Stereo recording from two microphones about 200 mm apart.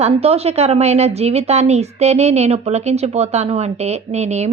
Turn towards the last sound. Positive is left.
turn(degrees=-35)  # may be behind; listen again after turning